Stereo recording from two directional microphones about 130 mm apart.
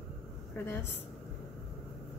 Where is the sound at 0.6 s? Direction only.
15° left (ahead or behind).